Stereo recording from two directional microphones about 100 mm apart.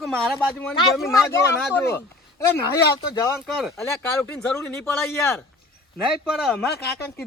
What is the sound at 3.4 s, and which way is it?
Speech, centre (ahead or behind).